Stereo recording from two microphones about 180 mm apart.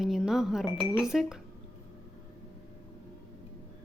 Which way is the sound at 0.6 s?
30° left (ahead or behind).